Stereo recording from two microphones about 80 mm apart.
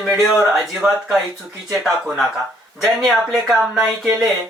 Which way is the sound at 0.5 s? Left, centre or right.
Centre.